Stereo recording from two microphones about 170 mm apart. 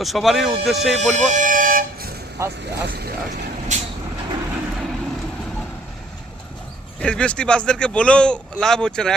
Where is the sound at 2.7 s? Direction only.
65° right (ahead or behind).